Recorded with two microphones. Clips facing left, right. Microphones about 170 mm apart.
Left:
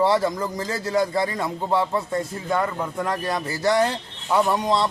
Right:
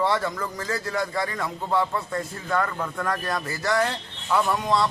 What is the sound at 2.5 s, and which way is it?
Speech, 20° left (ahead or behind).